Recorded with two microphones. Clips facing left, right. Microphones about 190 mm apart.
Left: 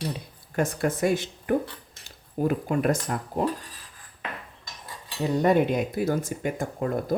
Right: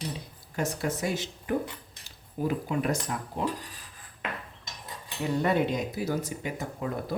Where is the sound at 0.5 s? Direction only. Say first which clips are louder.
Left 5 dB; 55° left (ahead or behind).